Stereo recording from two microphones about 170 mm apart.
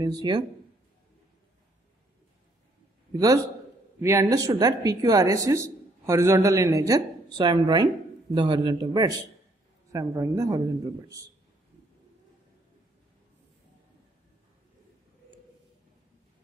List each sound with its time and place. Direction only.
0.0 s speech: 25° right (ahead or behind)
3.1 s a man's voice: 20° right (ahead or behind)